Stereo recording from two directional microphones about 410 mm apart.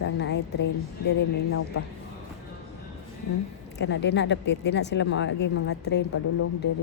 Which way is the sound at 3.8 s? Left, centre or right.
Left.